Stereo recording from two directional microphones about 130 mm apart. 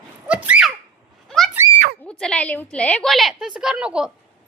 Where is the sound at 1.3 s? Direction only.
Centre (ahead or behind).